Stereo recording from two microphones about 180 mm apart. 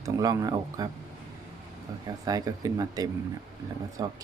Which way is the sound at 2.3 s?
20° right (ahead or behind).